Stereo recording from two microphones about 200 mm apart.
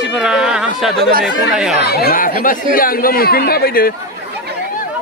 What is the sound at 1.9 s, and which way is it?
Speech, 50° left (ahead or behind).